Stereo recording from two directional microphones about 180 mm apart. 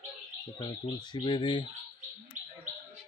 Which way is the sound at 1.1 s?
25° left (ahead or behind).